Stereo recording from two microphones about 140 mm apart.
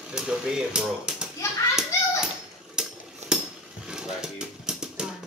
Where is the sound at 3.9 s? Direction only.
5° right (ahead or behind).